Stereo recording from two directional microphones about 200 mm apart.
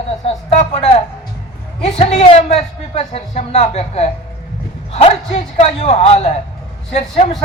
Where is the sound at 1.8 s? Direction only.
30° left (ahead or behind).